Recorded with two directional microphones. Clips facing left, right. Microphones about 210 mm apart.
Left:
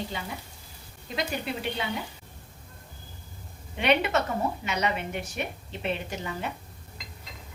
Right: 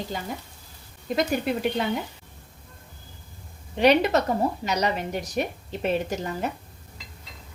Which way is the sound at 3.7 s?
40° right (ahead or behind).